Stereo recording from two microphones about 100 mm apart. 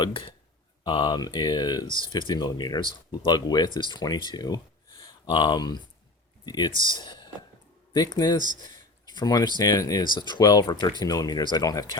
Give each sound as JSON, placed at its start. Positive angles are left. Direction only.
{"t": 0.0, "sound": "speech", "side_deg": 60}
{"t": 0.9, "sound": "speech", "side_deg": 45}